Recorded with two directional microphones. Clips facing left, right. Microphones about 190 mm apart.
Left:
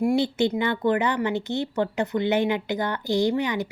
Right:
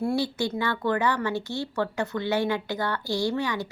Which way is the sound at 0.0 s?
20° left (ahead or behind).